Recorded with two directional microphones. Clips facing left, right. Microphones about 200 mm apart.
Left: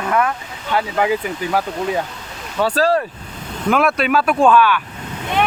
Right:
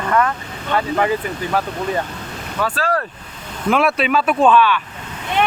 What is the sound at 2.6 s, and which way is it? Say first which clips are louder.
Speech: left 5 dB; 35° left (ahead or behind).